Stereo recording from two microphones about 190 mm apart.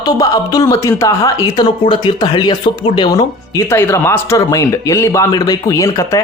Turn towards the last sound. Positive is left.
turn(degrees=15)  # may be behind; listen again after turning